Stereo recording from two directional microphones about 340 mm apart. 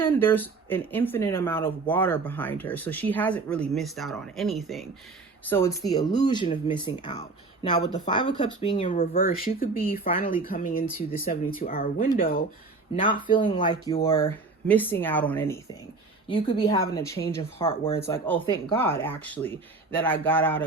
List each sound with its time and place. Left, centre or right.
0.0 s speech: centre
14.7 s speech: centre